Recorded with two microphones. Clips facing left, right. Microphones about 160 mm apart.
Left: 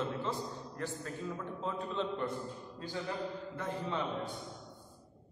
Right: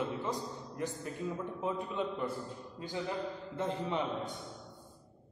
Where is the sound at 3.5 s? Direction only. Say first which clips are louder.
Right 7 dB; 20° right (ahead or behind).